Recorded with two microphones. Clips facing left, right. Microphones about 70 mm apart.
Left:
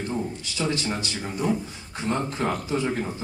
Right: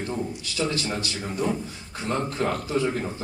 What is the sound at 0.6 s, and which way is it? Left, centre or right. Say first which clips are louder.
A man's voice: even; left.